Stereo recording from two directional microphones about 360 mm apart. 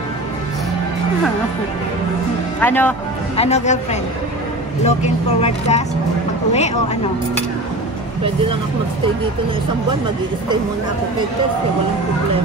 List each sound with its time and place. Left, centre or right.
2.6 s a man's voice: centre
3.3 s speech: centre